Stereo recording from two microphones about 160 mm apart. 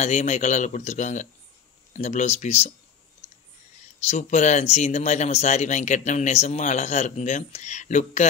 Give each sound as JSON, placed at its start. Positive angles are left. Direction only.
{"t": 0.0, "sound": "speech", "side_deg": 45}
{"t": 4.1, "sound": "speech", "side_deg": 45}